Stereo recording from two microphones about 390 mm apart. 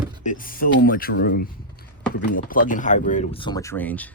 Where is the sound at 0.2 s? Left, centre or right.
Centre.